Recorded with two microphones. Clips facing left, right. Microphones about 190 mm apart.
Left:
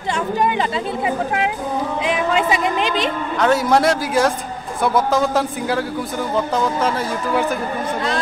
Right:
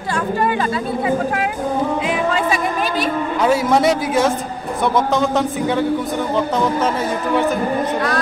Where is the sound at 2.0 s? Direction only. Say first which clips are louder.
Even; 20° left (ahead or behind).